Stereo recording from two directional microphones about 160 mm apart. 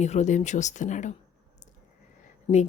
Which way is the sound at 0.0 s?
45° left (ahead or behind).